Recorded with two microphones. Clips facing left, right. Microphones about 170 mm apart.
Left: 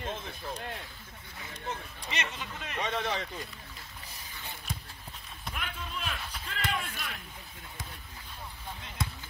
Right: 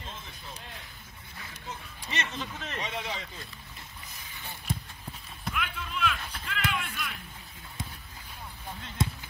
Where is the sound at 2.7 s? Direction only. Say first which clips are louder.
Left 5 dB; 55° left (ahead or behind).